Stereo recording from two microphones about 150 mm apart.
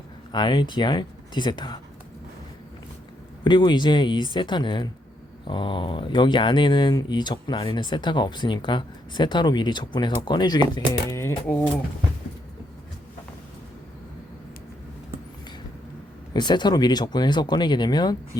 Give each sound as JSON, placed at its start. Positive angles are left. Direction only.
{"t": 0.3, "sound": "speech", "side_deg": 30}
{"t": 3.4, "sound": "speech", "side_deg": 30}
{"t": 16.3, "sound": "speech", "side_deg": 30}